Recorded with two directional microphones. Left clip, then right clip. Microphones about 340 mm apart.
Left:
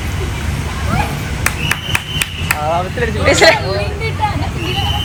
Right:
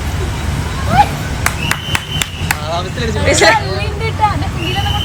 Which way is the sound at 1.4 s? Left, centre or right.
Right.